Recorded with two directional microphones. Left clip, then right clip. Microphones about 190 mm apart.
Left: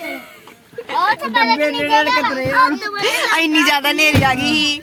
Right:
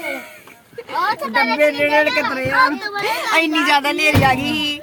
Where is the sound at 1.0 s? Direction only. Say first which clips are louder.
Left 2 dB; 30° right (ahead or behind).